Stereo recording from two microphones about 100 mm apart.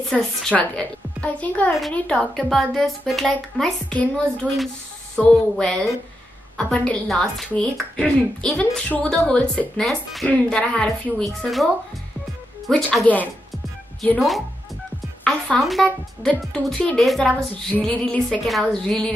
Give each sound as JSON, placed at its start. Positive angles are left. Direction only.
{"t": 0.1, "sound": "a woman's voice", "side_deg": 5}
{"t": 13.0, "sound": "a woman's voice", "side_deg": 15}
{"t": 14.1, "sound": "a woman's voice", "side_deg": 0}